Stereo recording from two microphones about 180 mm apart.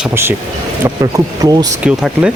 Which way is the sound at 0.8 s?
20° right (ahead or behind).